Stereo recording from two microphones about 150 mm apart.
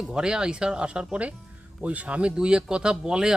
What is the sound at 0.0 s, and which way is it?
Speech, 5° right (ahead or behind).